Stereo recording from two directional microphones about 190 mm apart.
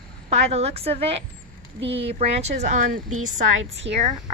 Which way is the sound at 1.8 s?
65° right (ahead or behind).